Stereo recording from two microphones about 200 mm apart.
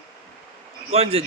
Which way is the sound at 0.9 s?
30° right (ahead or behind).